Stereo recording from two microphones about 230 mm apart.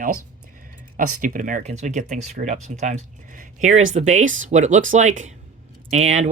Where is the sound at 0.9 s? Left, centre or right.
Right.